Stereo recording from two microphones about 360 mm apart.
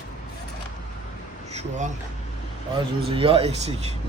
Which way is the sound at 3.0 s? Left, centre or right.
Centre.